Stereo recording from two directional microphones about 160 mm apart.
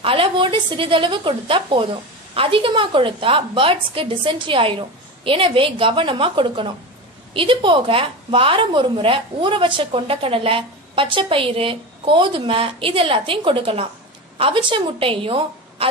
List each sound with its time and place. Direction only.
0.0 s a woman's voice: 35° right (ahead or behind)